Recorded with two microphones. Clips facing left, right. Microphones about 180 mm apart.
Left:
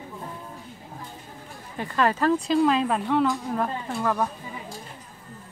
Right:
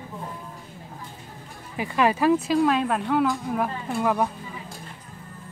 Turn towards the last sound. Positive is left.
turn(degrees=-10)  # may be behind; listen again after turning